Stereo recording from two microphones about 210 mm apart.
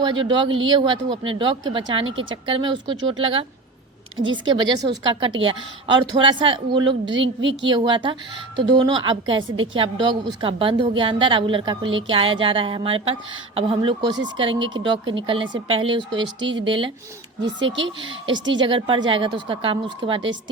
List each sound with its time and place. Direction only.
0.0 s speech: 20° right (ahead or behind)
4.4 s speech: 20° right (ahead or behind)
7.7 s speech: 20° right (ahead or behind)
16.2 s speech: 60° right (ahead or behind)
16.6 s speech: 25° right (ahead or behind)
17.4 s speech: 60° right (ahead or behind)
18.5 s speech: 25° right (ahead or behind)